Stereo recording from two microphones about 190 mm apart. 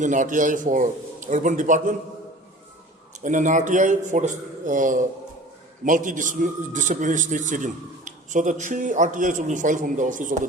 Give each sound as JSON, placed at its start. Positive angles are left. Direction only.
{"t": 0.0, "sound": "a man's voice", "side_deg": -40}
{"t": 3.2, "sound": "a man's voice", "side_deg": -40}